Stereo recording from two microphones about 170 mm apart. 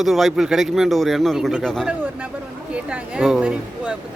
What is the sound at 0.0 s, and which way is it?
Speech, centre (ahead or behind).